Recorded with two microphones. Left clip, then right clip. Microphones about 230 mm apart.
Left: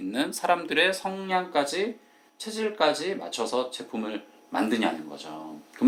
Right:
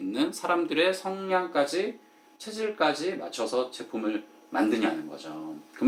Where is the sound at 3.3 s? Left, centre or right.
Left.